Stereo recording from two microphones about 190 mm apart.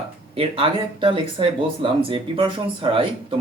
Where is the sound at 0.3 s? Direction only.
30° right (ahead or behind).